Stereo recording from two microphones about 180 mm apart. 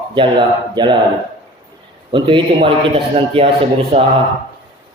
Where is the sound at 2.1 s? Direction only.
25° right (ahead or behind).